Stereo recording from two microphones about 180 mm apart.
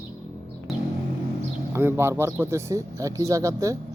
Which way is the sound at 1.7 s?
15° right (ahead or behind).